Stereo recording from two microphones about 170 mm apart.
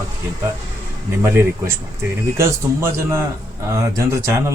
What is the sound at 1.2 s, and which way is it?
Speech, 15° right (ahead or behind).